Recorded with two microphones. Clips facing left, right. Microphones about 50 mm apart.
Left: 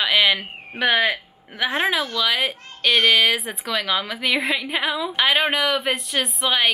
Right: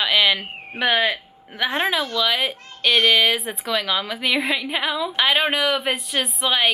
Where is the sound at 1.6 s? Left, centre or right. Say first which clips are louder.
Even; centre.